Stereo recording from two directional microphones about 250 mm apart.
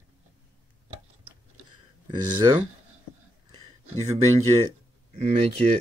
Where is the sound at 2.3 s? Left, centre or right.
Centre.